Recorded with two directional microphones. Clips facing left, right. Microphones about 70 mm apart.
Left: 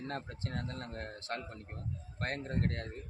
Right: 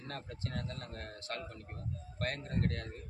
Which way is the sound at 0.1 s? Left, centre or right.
Left.